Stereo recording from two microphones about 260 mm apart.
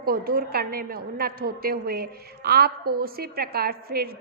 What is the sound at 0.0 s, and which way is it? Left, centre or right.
A woman's voice, right.